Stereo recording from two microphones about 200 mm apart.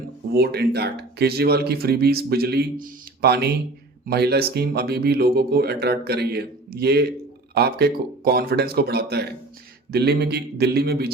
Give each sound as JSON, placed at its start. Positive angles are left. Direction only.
{"t": 0.3, "sound": "speech", "side_deg": -55}